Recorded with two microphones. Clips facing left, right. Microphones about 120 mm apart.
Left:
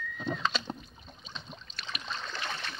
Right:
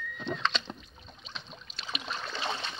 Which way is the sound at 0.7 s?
35° left (ahead or behind).